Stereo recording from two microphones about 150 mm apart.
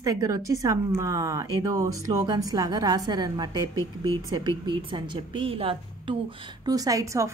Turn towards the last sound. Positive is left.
turn(degrees=-20)  # may be behind; listen again after turning